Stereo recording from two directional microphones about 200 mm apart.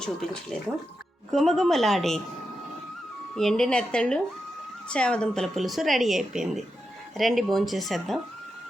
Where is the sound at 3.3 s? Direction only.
Centre (ahead or behind).